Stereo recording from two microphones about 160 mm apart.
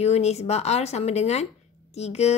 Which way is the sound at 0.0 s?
40° left (ahead or behind).